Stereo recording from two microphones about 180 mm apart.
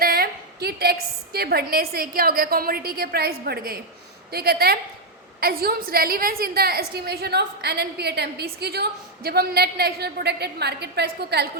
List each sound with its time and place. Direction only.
0.0 s a woman's voice: 55° right (ahead or behind)